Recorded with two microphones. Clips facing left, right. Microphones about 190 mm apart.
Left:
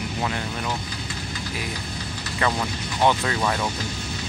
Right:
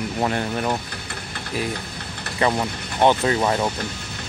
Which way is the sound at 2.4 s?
25° right (ahead or behind).